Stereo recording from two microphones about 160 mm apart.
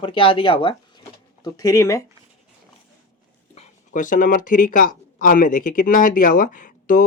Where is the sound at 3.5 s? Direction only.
55° left (ahead or behind).